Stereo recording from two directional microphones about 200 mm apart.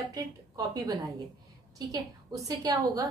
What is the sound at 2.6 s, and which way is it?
Speech, 20° right (ahead or behind).